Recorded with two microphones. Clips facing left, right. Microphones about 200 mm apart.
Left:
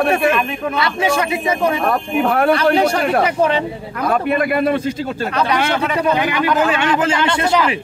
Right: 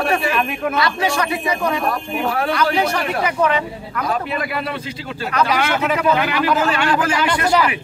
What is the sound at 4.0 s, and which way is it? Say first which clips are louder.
Speech: left 5 dB; 55° left (ahead or behind).